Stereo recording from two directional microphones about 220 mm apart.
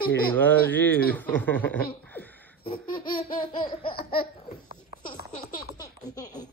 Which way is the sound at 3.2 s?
25° left (ahead or behind).